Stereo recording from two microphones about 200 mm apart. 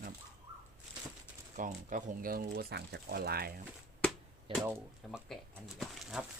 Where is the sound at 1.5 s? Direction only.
40° right (ahead or behind).